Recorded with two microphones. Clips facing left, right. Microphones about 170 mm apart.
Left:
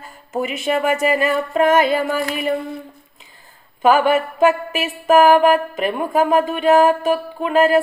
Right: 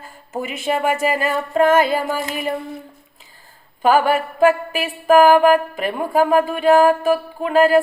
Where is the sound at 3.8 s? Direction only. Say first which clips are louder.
Left 1 dB; 35° right (ahead or behind).